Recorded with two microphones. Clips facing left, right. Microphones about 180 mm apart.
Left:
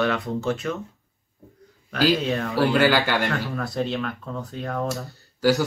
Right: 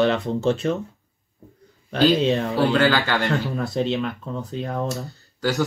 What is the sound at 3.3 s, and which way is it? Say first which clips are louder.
Speech: right 3 dB; 20° right (ahead or behind).